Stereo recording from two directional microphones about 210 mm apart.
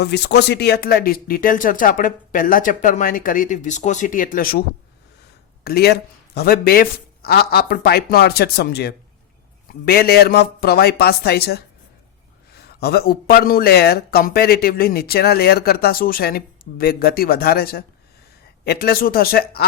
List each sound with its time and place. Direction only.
0.0 s speech: 50° left (ahead or behind)
5.6 s a man's voice: 50° left (ahead or behind)